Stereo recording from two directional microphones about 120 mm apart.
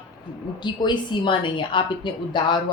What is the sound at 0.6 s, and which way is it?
A woman's voice, 40° left (ahead or behind).